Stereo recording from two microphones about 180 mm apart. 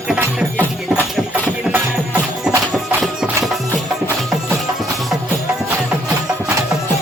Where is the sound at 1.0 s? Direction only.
Centre (ahead or behind).